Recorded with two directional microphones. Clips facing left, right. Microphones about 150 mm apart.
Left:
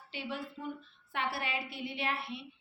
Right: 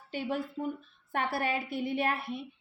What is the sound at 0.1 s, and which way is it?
A woman's voice, 45° right (ahead or behind).